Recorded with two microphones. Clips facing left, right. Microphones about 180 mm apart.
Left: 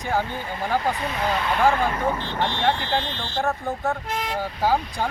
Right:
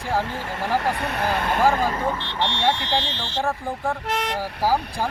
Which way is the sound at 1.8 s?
35° right (ahead or behind).